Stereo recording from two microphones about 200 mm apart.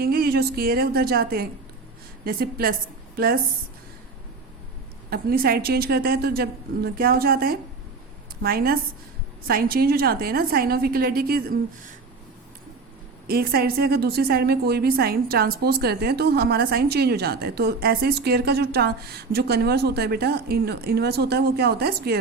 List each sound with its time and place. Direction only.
0.0 s a woman's voice: 50° right (ahead or behind)
5.1 s a woman's voice: 50° right (ahead or behind)
13.2 s a woman's voice: 50° right (ahead or behind)